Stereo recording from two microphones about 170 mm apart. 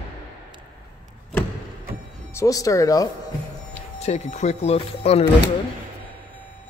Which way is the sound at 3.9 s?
40° left (ahead or behind).